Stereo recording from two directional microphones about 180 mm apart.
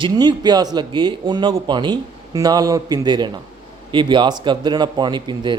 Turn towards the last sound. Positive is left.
turn(degrees=-25)  # may be behind; listen again after turning